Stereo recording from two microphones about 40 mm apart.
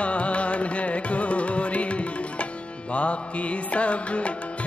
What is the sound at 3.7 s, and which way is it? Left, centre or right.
Music, left.